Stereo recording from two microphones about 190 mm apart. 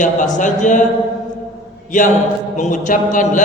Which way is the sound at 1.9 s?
40° left (ahead or behind).